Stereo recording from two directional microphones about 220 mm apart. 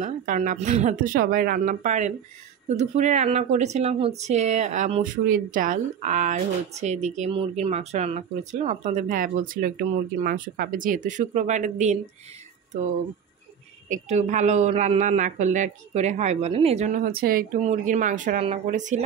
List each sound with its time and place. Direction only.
0.0 s speech: 35° right (ahead or behind)
13.8 s speech: 35° right (ahead or behind)